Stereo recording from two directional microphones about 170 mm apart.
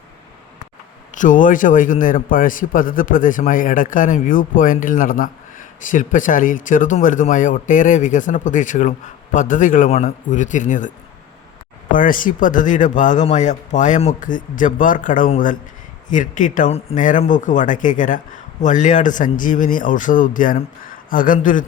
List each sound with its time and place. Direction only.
1.1 s a man's voice: 50° left (ahead or behind)